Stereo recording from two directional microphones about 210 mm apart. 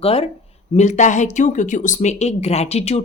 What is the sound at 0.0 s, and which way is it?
A woman's voice, 25° left (ahead or behind).